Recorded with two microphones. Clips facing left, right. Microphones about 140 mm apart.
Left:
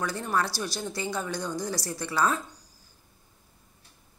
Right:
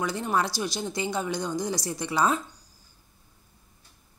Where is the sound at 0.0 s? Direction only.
15° right (ahead or behind).